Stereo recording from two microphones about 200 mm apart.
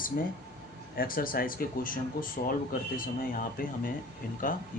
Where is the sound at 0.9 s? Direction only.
45° left (ahead or behind).